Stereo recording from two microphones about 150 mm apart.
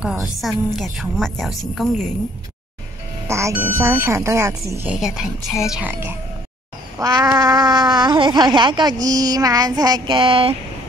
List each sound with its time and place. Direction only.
0.2 s a woman's voice: centre (ahead or behind)
3.3 s speech: 20° right (ahead or behind)
4.8 s a woman's voice: 5° right (ahead or behind)
7.0 s speech: 25° right (ahead or behind)